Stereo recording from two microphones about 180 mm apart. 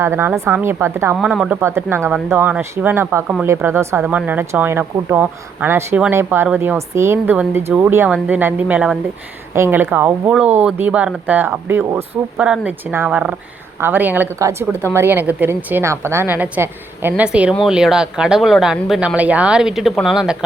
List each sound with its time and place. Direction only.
0.0 s speech: 15° right (ahead or behind)